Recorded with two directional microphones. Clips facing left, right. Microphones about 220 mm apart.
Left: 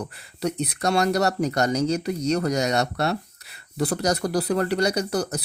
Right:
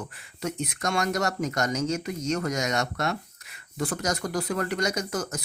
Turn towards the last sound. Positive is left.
turn(degrees=35)  # may be behind; listen again after turning